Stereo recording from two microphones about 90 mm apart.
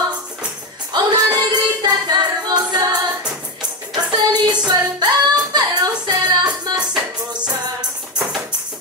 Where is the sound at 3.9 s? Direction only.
55° right (ahead or behind).